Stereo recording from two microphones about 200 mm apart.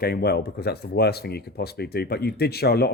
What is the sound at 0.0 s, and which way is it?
Speech, 50° left (ahead or behind).